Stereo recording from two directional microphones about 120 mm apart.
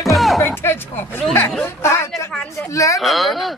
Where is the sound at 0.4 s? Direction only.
20° left (ahead or behind).